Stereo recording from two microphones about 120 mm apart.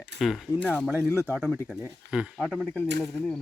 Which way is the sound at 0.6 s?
10° left (ahead or behind).